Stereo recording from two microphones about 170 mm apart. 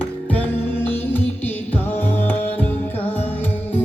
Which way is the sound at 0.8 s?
10° left (ahead or behind).